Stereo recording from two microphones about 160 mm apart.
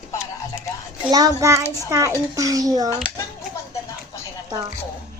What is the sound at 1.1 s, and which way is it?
Speech, 20° right (ahead or behind).